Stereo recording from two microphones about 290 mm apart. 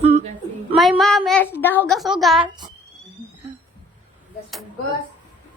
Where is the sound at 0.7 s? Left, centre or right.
Centre.